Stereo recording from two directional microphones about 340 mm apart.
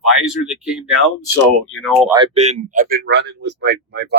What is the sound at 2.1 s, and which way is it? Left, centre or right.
Speech, centre.